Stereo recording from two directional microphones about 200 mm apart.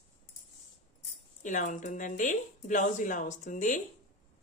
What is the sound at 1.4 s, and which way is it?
A woman's voice, 40° left (ahead or behind).